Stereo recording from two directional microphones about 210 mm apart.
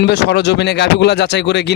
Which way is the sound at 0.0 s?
55° left (ahead or behind).